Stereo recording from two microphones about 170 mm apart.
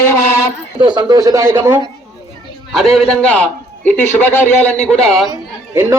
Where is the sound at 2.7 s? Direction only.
Centre (ahead or behind).